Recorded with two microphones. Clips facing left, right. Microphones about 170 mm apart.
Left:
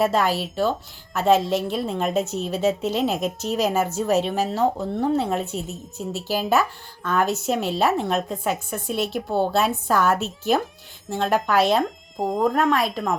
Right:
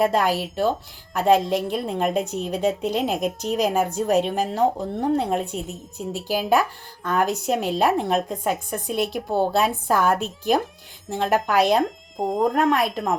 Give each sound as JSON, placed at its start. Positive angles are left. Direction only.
{"t": 0.0, "sound": "a woman's voice", "side_deg": 0}
{"t": 4.5, "sound": "speech", "side_deg": -15}
{"t": 5.1, "sound": "a woman's voice", "side_deg": 5}
{"t": 9.8, "sound": "a woman's voice", "side_deg": -25}
{"t": 11.1, "sound": "a woman's voice", "side_deg": 0}